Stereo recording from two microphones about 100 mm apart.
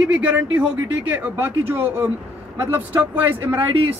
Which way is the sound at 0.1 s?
15° right (ahead or behind).